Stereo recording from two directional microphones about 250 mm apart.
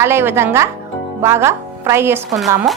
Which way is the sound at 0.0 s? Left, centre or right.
Centre.